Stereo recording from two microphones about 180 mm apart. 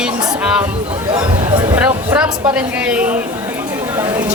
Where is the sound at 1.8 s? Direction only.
5° right (ahead or behind).